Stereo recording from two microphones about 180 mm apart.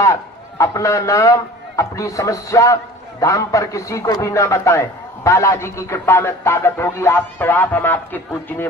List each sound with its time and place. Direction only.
0.0 s a man's voice: 15° left (ahead or behind)